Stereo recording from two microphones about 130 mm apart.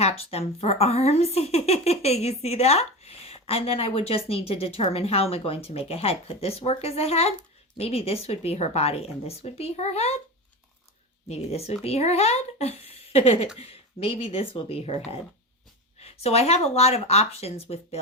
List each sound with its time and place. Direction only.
0.0 s speech: 50° left (ahead or behind)
11.3 s speech: 55° left (ahead or behind)